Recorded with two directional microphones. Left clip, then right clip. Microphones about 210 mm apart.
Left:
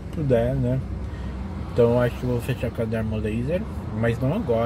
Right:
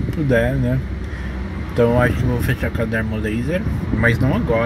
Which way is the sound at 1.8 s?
Centre (ahead or behind).